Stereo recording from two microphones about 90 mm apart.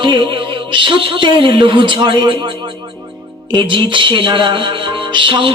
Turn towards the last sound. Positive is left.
turn(degrees=-65)  # may be behind; listen again after turning